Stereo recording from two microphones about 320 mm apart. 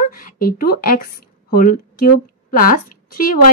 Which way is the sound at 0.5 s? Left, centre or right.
Left.